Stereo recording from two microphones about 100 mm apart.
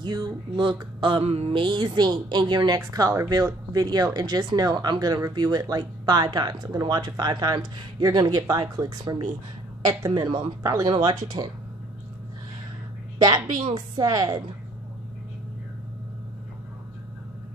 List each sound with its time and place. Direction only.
0.0 s a woman's voice: 50° right (ahead or behind)
1.2 s a woman's voice: 80° right; by 10.9 s 35° right (ahead or behind)
10.9 s a woman's voice: 50° right (ahead or behind)
13.6 s a woman's voice: 50° right (ahead or behind)